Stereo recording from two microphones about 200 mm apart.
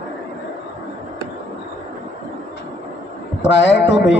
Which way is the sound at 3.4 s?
65° left (ahead or behind).